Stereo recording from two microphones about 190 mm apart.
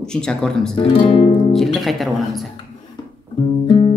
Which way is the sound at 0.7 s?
30° left (ahead or behind).